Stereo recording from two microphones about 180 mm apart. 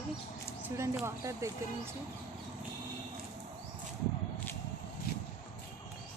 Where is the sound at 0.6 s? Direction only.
10° right (ahead or behind).